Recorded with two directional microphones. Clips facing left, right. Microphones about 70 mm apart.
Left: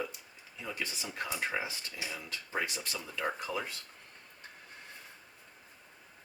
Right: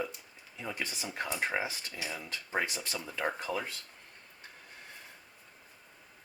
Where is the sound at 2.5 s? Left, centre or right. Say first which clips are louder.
Right 2 dB; right.